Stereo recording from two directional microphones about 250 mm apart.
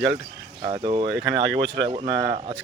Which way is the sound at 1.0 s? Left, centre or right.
Right.